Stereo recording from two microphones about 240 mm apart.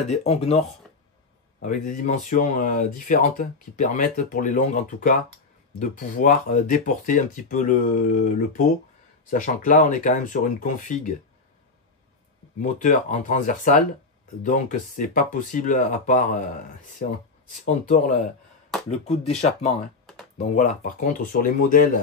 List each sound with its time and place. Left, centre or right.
0.1 s speech: left
12.6 s speech: left
17.5 s speech: left
20.3 s speech: left